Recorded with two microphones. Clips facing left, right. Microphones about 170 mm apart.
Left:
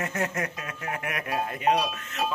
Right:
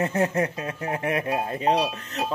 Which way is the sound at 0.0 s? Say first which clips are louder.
Right 7 dB; 30° right (ahead or behind).